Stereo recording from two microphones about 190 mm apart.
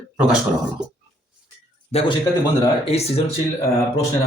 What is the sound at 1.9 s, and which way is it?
Speech, 30° left (ahead or behind).